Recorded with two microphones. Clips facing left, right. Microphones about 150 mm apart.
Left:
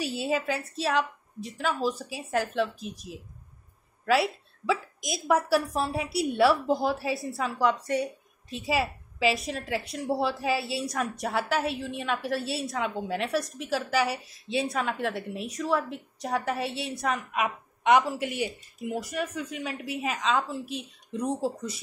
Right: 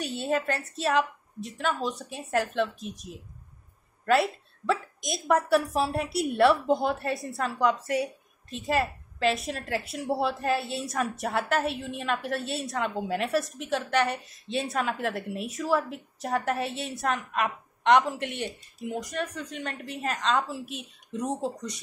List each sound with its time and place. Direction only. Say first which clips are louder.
0.0 s a woman's voice: even; centre (ahead or behind)